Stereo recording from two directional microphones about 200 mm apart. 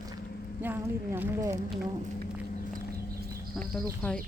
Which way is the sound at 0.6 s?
10° right (ahead or behind).